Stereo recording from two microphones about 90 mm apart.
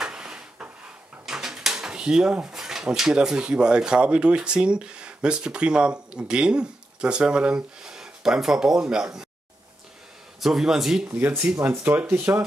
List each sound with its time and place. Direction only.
0.0 s rub: 10° right (ahead or behind)
1.2 s speech: 5° right (ahead or behind)
10.4 s a man's voice: 5° right (ahead or behind)
11.1 s speech: 20° right (ahead or behind)